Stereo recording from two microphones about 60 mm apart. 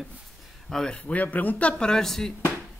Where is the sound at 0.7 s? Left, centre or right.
Centre.